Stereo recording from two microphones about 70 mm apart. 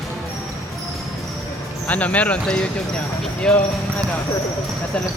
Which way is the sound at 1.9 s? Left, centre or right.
Left.